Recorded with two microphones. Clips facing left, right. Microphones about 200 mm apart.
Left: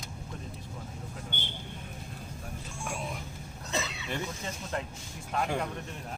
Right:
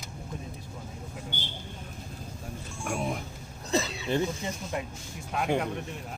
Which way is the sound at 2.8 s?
50° right (ahead or behind).